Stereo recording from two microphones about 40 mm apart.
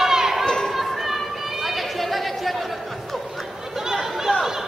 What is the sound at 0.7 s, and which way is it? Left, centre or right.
Chatter, centre.